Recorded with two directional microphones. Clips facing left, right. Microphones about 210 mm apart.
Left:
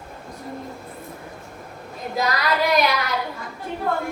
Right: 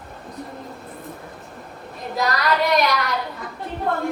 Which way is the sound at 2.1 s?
Centre (ahead or behind).